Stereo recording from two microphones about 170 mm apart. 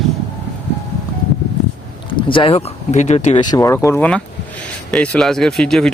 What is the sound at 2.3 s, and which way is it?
Speech, 30° left (ahead or behind).